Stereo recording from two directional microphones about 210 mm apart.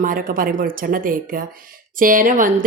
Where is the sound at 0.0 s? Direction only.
40° right (ahead or behind).